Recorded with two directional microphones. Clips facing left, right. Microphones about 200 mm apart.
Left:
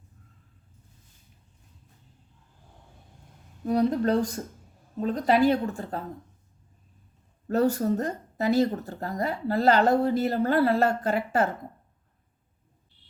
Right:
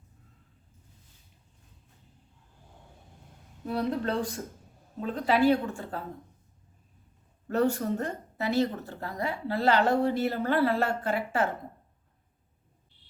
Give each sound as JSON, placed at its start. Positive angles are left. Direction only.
{"t": 3.7, "sound": "a woman's voice", "side_deg": 40}
{"t": 7.4, "sound": "speech", "side_deg": 40}